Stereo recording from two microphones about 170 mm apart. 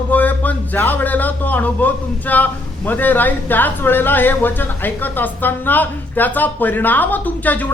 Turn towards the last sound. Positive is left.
turn(degrees=10)  # may be behind; listen again after turning